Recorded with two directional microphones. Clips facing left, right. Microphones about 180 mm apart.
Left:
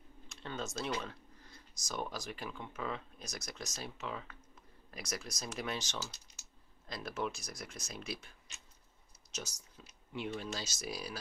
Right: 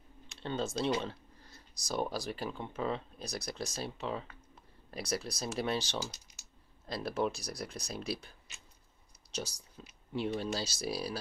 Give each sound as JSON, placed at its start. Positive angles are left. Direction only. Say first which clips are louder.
{"t": 0.4, "sound": "speech", "louder": "right 6 dB", "side_deg": -30}